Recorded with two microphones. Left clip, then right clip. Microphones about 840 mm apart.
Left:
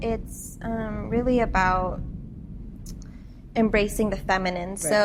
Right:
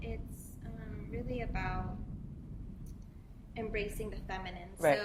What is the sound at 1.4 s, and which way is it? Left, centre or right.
Speech, left.